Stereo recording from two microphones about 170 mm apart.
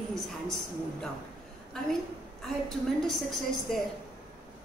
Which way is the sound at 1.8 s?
5° left (ahead or behind).